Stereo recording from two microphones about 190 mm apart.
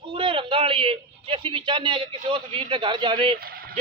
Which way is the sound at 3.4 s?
50° right (ahead or behind).